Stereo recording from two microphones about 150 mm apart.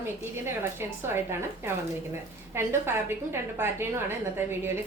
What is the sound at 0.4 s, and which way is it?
A woman's voice, 15° right (ahead or behind).